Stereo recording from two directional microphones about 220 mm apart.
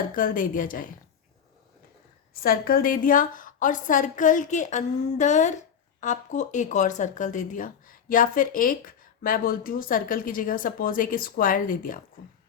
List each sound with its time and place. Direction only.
0.1 s speech: 40° left (ahead or behind)
2.3 s speech: 40° left (ahead or behind)